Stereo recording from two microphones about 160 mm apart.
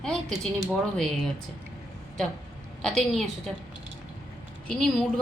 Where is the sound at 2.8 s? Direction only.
Centre (ahead or behind).